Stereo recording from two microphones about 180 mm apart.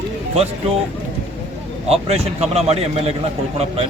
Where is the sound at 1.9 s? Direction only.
35° right (ahead or behind).